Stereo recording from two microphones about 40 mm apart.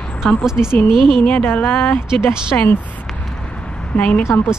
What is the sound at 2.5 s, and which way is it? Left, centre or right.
Speech, left.